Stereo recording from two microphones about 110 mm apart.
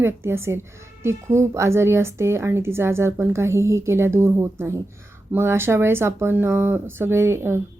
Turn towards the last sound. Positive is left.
turn(degrees=-20)  # may be behind; listen again after turning